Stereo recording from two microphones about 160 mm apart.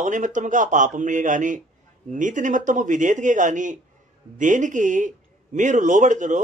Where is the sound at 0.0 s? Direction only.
50° right (ahead or behind).